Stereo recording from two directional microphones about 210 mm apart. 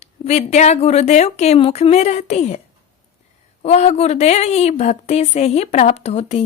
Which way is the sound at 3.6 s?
30° left (ahead or behind).